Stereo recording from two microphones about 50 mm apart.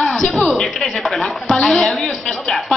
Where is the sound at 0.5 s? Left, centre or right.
Centre.